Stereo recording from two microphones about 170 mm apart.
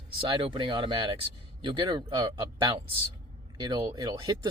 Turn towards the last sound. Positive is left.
turn(degrees=-20)  # may be behind; listen again after turning